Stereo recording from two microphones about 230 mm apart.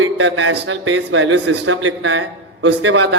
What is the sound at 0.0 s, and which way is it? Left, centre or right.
A man's voice, right.